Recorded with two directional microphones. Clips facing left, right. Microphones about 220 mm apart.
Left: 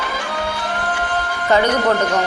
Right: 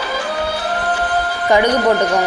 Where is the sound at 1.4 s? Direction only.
15° right (ahead or behind).